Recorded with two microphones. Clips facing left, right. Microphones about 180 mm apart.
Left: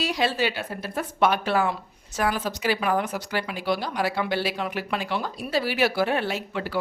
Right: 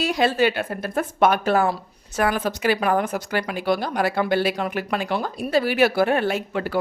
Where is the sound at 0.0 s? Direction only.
50° right (ahead or behind).